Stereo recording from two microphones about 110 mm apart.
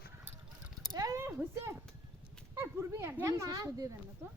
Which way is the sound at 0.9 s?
35° right (ahead or behind).